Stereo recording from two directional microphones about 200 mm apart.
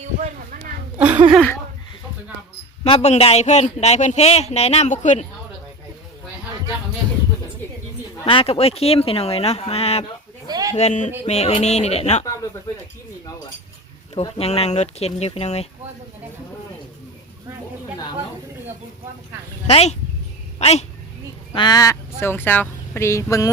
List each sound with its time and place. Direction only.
0.9 s a sound: 5° right (ahead or behind)
1.3 s speech: 5° left (ahead or behind)
2.8 s a man's voice: 30° left (ahead or behind)
8.2 s speech: 25° left (ahead or behind)
10.4 s a sound: 20° right (ahead or behind)
10.8 s a man's voice: 35° left (ahead or behind)
14.2 s a man's voice: 30° left (ahead or behind)
19.6 s a man's voice: 30° left (ahead or behind)
21.5 s speech: 20° left (ahead or behind)